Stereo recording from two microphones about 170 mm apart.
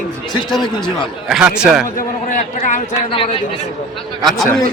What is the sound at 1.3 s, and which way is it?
Speech, 5° right (ahead or behind).